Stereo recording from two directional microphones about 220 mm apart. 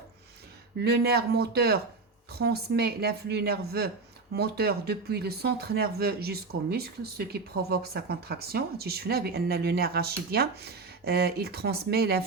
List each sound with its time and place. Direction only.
0.8 s speech: 45° right (ahead or behind)